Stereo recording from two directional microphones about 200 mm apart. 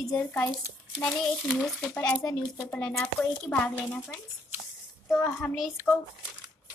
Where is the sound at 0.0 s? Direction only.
5° left (ahead or behind).